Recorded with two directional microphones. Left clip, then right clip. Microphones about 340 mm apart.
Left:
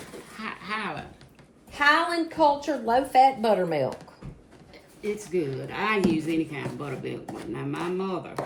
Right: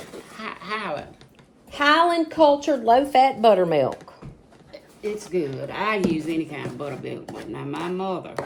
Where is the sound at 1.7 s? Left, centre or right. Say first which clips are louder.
Right 4 dB; right.